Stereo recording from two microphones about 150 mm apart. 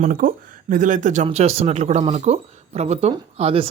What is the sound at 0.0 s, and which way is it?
Speech, 70° right (ahead or behind).